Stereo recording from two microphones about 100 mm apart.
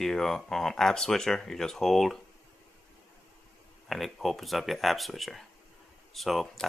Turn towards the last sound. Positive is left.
turn(degrees=0)  # may be behind; listen again after turning